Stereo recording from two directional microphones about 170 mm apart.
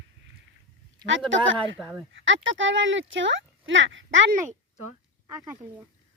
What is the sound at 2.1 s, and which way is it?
Speech, 90° right.